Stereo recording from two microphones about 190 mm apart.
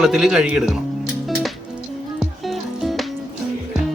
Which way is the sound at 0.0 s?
5° right (ahead or behind).